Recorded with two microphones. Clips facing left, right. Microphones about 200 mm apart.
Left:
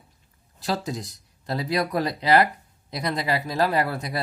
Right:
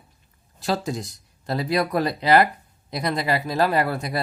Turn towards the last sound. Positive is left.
turn(degrees=-55)  # may be behind; listen again after turning